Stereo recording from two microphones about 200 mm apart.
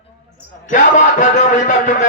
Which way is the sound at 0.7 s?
40° left (ahead or behind).